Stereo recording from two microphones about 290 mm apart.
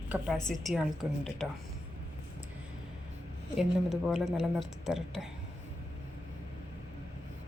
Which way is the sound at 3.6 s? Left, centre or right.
Centre.